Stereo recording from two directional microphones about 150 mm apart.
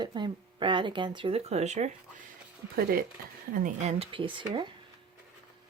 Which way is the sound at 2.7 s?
75° right (ahead or behind).